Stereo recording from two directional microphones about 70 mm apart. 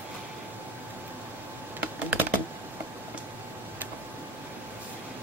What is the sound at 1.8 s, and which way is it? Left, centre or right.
Computer keyboard, right.